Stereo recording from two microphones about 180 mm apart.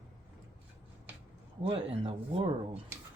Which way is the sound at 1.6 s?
30° right (ahead or behind).